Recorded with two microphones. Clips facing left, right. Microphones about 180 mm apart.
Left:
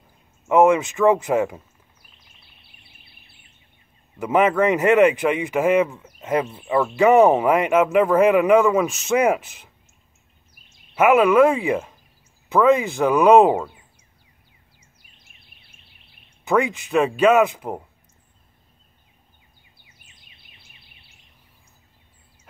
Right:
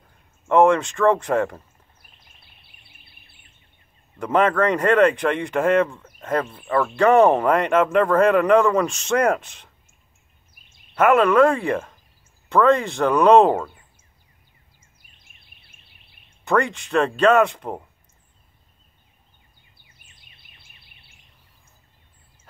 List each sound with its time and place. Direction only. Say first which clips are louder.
0.5 s speech: left 1 dB; 5° left (ahead or behind)
4.2 s speech: left 1 dB; 5° left (ahead or behind)
11.0 s speech: left 1 dB; 5° left (ahead or behind)
16.4 s speech: left 1 dB; 5° left (ahead or behind)
20.1 s a sound: left 1 dB; 50° right (ahead or behind)